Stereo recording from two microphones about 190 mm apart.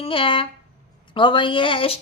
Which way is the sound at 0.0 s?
30° left (ahead or behind).